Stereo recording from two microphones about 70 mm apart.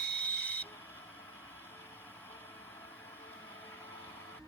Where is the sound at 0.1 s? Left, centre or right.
Left.